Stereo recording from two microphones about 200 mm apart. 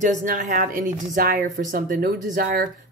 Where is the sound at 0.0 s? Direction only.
40° right (ahead or behind).